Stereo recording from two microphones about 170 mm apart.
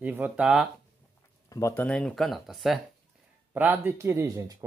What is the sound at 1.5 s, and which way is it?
A man's voice, 20° left (ahead or behind).